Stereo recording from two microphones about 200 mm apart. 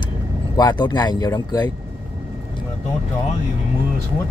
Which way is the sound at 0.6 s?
20° left (ahead or behind).